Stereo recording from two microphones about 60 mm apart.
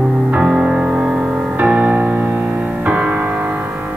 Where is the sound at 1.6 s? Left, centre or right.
Right.